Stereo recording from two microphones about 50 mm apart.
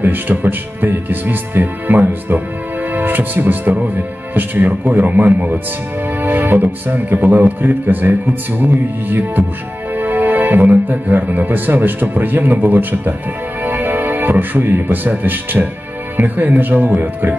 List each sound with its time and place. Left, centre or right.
0.0 s speech: right